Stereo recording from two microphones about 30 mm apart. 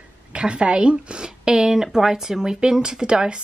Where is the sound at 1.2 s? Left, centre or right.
Right.